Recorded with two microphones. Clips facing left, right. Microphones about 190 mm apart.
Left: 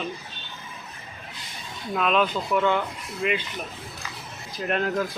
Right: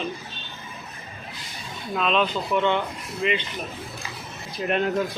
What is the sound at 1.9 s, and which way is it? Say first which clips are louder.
Speech: even; 5° left (ahead or behind).